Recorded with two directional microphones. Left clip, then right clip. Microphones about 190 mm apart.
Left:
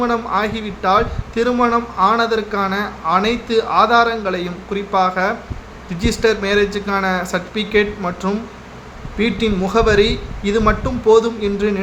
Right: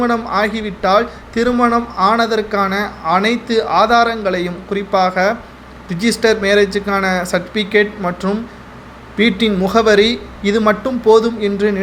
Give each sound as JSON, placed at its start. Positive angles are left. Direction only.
{"t": 0.0, "sound": "a man's voice", "side_deg": -15}